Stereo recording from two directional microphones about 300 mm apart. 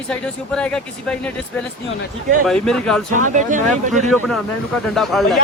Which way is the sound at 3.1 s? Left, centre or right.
Right.